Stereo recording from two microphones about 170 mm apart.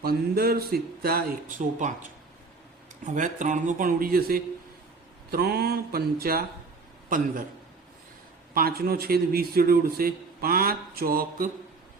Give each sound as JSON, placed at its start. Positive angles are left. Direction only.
{"t": 0.0, "sound": "a man's voice", "side_deg": -65}
{"t": 3.2, "sound": "a man's voice", "side_deg": -50}
{"t": 8.5, "sound": "a man's voice", "side_deg": -65}